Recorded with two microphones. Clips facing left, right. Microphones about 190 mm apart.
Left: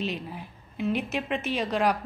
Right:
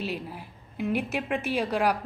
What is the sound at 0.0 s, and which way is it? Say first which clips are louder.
A woman's voice: left 1 dB; 10° right (ahead or behind).